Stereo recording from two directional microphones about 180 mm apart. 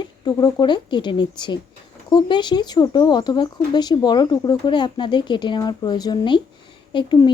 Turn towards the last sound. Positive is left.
turn(degrees=25)  # may be behind; listen again after turning